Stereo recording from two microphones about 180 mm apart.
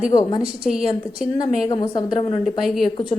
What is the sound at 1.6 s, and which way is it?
Speech, 25° left (ahead or behind).